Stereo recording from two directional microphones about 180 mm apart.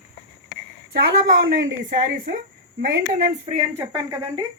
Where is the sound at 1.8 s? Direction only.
45° right (ahead or behind).